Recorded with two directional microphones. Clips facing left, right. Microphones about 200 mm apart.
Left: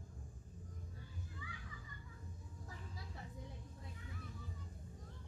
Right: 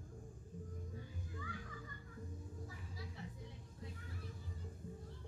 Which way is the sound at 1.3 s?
45° right (ahead or behind).